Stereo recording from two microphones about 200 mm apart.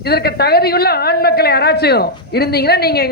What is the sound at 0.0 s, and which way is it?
A man's voice, 50° left (ahead or behind).